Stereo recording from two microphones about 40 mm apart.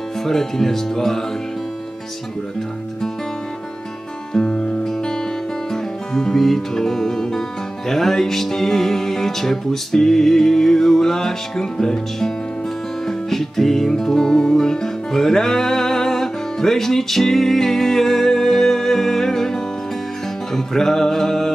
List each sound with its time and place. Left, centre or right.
0.2 s speech: centre
4.3 s music: centre
6.1 s speech: centre
13.0 s music: centre